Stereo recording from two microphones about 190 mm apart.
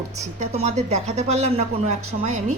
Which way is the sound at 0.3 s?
35° right (ahead or behind).